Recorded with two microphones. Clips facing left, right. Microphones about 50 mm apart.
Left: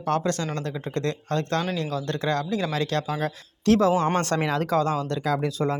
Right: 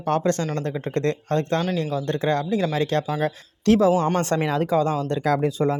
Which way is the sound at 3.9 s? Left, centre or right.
Left.